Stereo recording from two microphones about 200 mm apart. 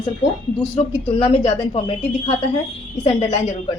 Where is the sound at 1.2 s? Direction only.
30° left (ahead or behind).